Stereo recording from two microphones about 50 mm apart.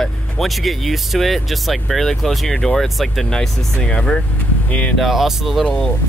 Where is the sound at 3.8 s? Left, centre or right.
Centre.